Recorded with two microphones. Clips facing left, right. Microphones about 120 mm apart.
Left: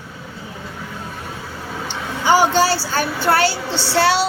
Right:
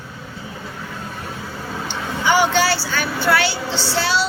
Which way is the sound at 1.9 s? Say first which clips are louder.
Left 3 dB; 40° left (ahead or behind).